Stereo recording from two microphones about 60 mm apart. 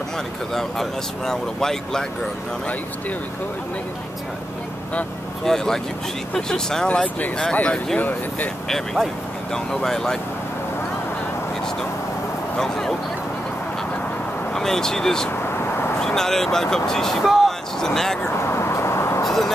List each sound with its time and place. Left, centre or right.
0.6 s speech: centre
5.4 s speech: centre; by 8.5 s left
8.6 s speech: centre
12.5 s speech: centre
14.5 s speech: centre
18.5 s vehicle: left
19.2 s vehicle: centre